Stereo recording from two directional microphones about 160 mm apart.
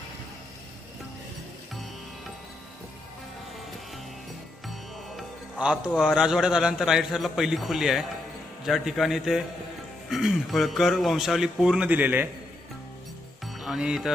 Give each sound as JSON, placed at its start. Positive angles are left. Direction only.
{"t": 4.6, "sound": "music", "side_deg": 0}
{"t": 6.0, "sound": "speech", "side_deg": -5}
{"t": 13.4, "sound": "music", "side_deg": 0}